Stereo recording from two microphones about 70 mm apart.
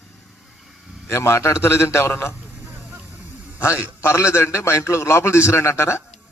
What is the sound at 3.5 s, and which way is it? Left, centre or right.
A man's voice, left.